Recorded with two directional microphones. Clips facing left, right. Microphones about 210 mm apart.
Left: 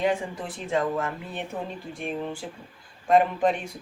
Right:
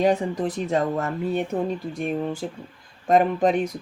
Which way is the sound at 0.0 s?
40° right (ahead or behind).